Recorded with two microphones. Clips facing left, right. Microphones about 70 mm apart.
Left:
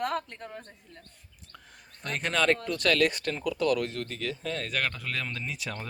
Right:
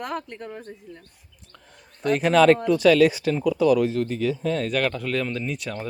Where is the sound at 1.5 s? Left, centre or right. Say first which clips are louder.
Right 1 dB; centre.